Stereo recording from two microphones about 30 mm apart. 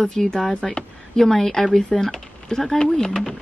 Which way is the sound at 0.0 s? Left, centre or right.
Centre.